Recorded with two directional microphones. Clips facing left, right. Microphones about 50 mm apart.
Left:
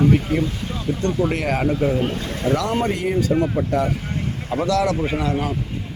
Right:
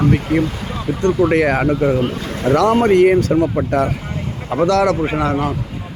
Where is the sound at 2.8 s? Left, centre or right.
Right.